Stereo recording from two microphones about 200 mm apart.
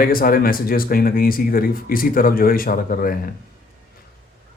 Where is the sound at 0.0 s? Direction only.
45° left (ahead or behind).